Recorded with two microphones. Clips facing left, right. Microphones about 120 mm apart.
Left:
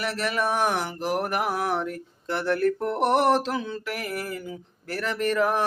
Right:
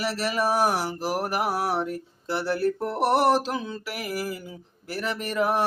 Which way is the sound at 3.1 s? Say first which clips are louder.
Right 1 dB; 35° right (ahead or behind).